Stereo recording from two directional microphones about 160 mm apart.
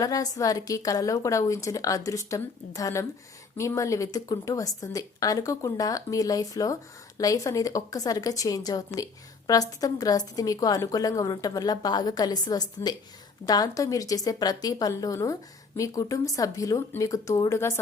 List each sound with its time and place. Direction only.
0.0 s a woman's voice: 20° left (ahead or behind)